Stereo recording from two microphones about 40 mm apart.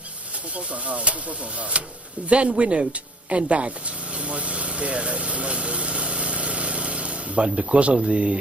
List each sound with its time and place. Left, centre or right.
0.6 s speech: right